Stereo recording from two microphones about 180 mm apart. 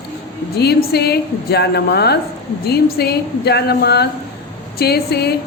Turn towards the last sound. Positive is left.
turn(degrees=60)  # may be behind; listen again after turning